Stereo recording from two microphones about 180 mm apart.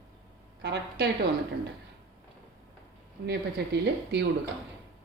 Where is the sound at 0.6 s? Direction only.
65° right (ahead or behind).